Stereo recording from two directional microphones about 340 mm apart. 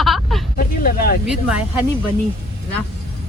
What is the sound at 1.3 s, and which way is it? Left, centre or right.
Speech, centre.